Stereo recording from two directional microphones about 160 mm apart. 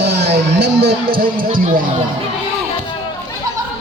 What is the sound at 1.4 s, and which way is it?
Speech, 60° right (ahead or behind).